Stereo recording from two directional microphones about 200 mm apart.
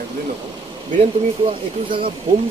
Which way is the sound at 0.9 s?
25° right (ahead or behind).